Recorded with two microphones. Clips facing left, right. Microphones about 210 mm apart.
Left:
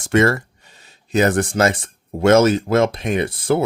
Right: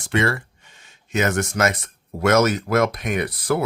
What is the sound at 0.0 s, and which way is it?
Speech, 45° left (ahead or behind).